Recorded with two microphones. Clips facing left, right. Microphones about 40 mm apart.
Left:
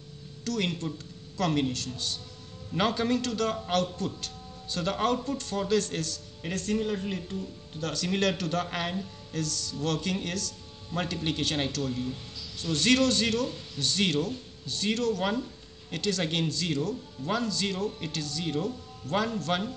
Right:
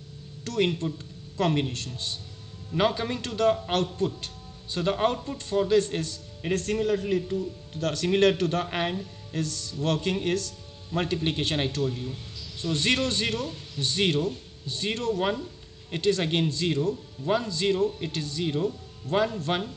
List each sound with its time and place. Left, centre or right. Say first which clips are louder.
0.4 s music: right 4 dB; right
0.9 s a man's voice: right 4 dB; right
2.7 s a man's voice: right 1 dB; centre
3.2 s a man's voice: right 5 dB; right
3.7 s music: right 2 dB; right
4.7 s a man's voice: right 2 dB; right
6.5 s music: right 4 dB; right
7.0 s a man's voice: right 7 dB; centre
7.8 s music: right 6 dB; right
8.6 s a man's voice: right 4 dB; right
9.3 s music: right 2 dB; right
11.0 s a man's voice: right 3 dB; right